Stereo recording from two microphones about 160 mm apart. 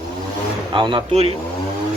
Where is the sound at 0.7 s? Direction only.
30° right (ahead or behind).